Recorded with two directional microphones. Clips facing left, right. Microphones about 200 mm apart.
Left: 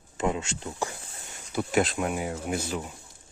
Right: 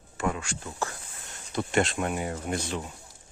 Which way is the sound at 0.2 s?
20° left (ahead or behind).